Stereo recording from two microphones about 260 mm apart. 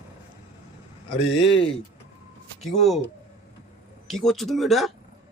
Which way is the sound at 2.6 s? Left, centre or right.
Centre.